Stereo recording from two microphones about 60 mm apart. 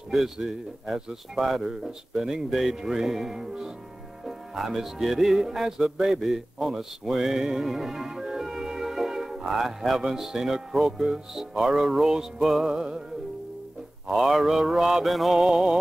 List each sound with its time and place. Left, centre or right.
0.1 s speech: centre
4.3 s music: centre
11.0 s speech: centre
14.0 s speech: centre
15.4 s music: centre